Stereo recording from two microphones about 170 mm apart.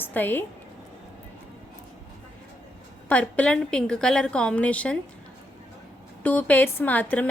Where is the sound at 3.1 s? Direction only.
10° left (ahead or behind).